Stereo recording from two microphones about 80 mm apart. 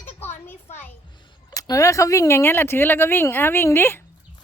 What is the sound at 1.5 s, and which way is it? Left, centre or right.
A woman's voice, left.